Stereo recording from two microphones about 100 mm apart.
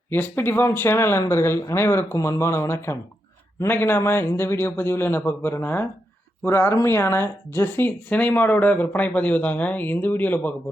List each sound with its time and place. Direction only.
0.1 s speech: 20° left (ahead or behind)